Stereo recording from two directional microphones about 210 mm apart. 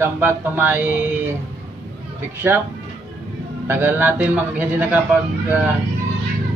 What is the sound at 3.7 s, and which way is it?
Speech, 10° right (ahead or behind).